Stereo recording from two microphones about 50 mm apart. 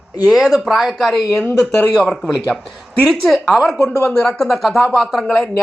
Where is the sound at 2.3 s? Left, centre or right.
Centre.